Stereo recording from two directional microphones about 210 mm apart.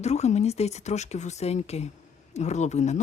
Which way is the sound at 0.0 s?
30° left (ahead or behind).